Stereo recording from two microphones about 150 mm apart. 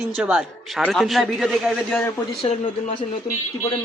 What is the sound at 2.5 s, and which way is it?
Speech, 45° left (ahead or behind).